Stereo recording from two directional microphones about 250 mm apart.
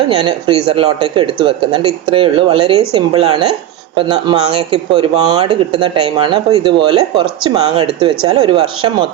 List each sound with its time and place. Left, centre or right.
0.2 s speech: right